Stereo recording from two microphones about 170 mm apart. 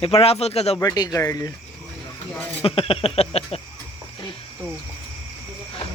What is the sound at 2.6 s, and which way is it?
Speech, 35° left (ahead or behind).